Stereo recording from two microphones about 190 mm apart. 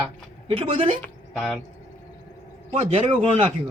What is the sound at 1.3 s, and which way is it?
Speech, centre (ahead or behind).